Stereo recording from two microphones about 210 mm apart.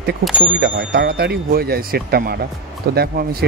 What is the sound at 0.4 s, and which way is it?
Speech, 55° right (ahead or behind).